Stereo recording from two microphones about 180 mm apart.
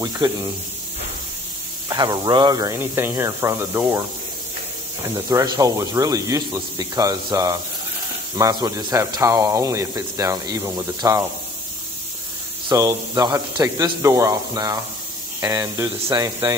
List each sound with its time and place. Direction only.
0.0 s speech: 20° right (ahead or behind)
1.9 s speech: 20° right (ahead or behind)
5.0 s speech: 15° right (ahead or behind)
12.6 s speech: 20° right (ahead or behind)